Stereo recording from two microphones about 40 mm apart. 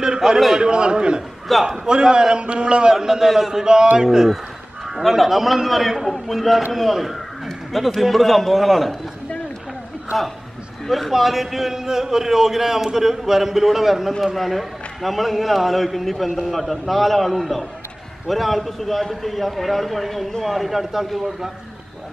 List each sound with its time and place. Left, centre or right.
0.2 s a man's voice: centre
0.6 s a man's voice: right
1.5 s a man's voice: centre
1.9 s a man's voice: right
10.1 s a man's voice: centre